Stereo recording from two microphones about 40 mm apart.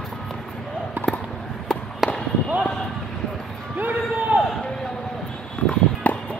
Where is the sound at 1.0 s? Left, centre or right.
Right.